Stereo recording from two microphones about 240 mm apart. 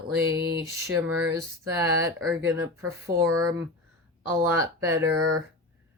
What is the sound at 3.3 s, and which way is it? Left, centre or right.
Speech, right.